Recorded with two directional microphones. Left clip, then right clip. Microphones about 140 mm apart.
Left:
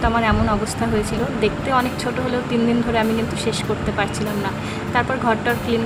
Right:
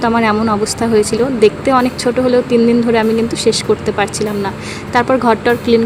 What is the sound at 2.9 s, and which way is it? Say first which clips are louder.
Speech: right 7 dB; 30° right (ahead or behind).